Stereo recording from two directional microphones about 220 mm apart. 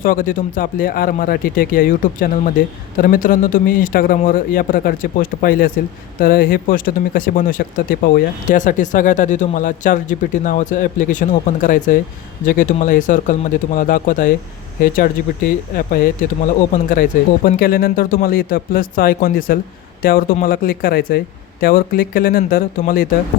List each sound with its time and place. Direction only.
0.0 s speech: 40° left (ahead or behind)